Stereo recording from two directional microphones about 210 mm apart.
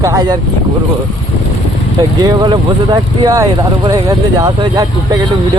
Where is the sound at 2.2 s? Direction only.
20° right (ahead or behind).